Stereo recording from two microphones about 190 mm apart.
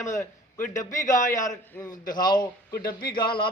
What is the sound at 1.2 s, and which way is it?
Speech, 45° left (ahead or behind).